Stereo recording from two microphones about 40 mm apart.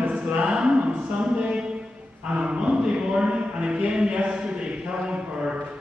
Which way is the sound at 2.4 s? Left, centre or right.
Right.